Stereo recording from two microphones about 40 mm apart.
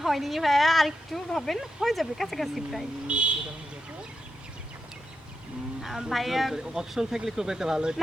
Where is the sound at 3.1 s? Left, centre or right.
Right.